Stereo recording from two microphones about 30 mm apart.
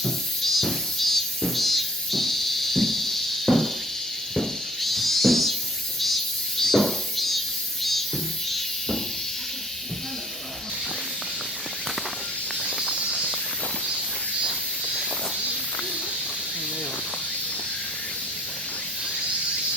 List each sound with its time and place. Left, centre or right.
0.0 s music: centre
6.6 s music: centre
12.8 s snake: right